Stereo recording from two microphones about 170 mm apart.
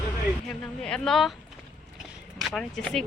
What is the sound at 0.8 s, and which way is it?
Speech, 5° left (ahead or behind).